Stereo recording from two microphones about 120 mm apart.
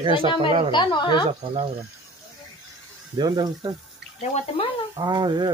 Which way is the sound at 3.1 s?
35° right (ahead or behind).